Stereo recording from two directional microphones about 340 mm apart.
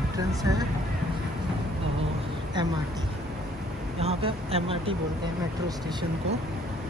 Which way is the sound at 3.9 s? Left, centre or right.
Centre.